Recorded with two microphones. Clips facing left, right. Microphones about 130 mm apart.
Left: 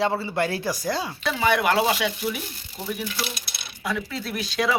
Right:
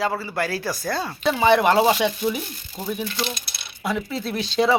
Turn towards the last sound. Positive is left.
turn(degrees=-25)  # may be behind; listen again after turning